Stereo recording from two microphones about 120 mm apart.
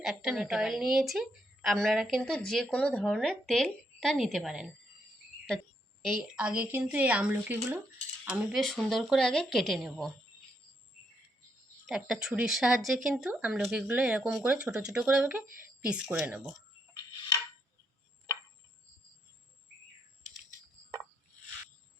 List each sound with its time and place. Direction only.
0.0 s a woman's voice: centre (ahead or behind)
6.0 s a woman's voice: centre (ahead or behind)
6.4 s speech: 10° right (ahead or behind)
8.2 s mechanisms: 5° right (ahead or behind)
8.6 s a woman's voice: centre (ahead or behind)
11.9 s a woman's voice: 5° right (ahead or behind)